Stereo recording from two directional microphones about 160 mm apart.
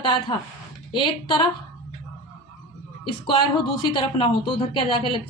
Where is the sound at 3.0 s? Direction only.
30° left (ahead or behind).